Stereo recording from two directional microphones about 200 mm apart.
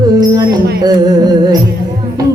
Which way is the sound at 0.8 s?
20° right (ahead or behind).